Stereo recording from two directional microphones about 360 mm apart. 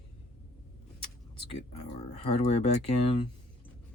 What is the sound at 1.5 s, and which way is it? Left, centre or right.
Speech, centre.